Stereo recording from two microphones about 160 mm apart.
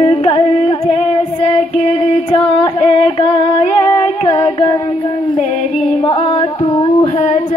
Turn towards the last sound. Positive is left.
turn(degrees=30)  # may be behind; listen again after turning